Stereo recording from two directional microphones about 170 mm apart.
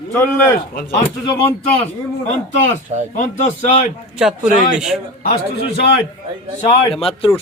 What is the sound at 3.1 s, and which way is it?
Speech, 50° left (ahead or behind).